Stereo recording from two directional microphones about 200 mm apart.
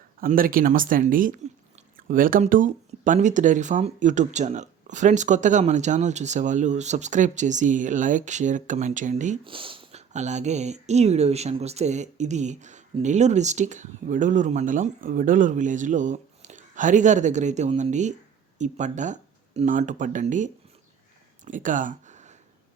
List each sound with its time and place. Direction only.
0.2 s speech: 45° right (ahead or behind)
9.4 s speech: 25° right (ahead or behind)
21.4 s a sound: 40° right (ahead or behind)